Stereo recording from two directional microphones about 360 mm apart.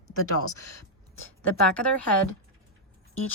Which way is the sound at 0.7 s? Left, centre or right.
Left.